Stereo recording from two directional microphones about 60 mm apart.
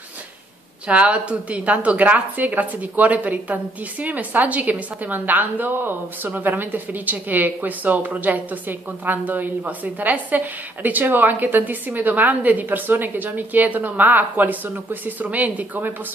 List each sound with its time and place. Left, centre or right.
0.8 s a woman's voice: right